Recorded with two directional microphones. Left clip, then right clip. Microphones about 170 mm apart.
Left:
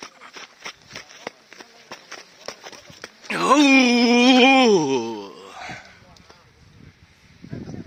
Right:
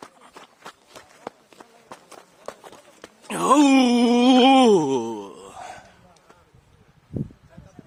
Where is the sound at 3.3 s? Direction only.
15° right (ahead or behind).